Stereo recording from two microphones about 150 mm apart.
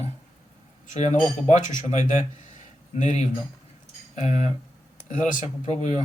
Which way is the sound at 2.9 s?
50° left (ahead or behind).